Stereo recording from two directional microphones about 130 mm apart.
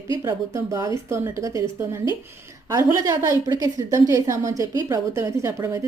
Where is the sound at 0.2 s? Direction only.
25° right (ahead or behind).